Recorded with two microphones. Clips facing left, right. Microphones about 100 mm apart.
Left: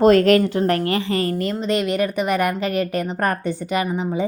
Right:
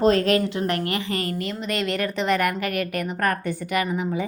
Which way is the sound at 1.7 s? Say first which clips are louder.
Left 5 dB; 20° left (ahead or behind).